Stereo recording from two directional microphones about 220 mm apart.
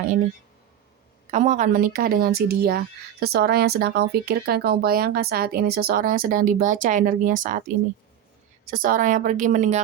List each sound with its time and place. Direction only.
1.3 s speech: 35° right (ahead or behind)
8.7 s speech: 40° right (ahead or behind)